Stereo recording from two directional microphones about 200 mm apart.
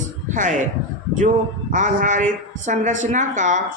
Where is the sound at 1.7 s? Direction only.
40° right (ahead or behind).